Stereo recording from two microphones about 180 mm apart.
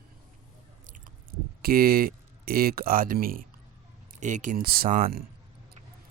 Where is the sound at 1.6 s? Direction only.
55° right (ahead or behind).